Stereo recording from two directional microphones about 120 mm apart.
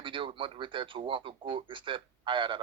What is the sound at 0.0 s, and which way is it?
A man's voice, 45° right (ahead or behind).